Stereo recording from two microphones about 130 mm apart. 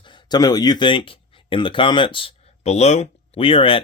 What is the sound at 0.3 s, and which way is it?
Speech, 30° left (ahead or behind).